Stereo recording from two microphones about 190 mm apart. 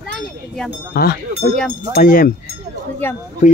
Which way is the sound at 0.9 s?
55° left (ahead or behind).